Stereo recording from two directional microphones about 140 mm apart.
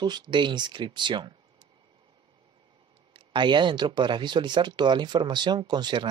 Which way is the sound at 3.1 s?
35° right (ahead or behind).